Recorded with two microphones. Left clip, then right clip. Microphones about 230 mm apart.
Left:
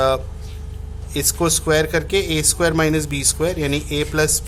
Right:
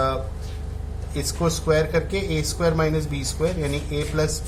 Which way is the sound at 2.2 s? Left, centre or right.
Left.